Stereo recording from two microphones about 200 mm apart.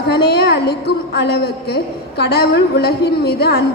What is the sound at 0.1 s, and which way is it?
A woman's voice, 55° left (ahead or behind).